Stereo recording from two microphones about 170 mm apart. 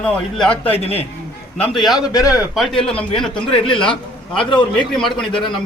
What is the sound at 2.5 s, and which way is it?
Speech, centre (ahead or behind).